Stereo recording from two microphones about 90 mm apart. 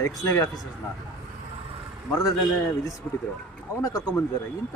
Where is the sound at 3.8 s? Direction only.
40° left (ahead or behind).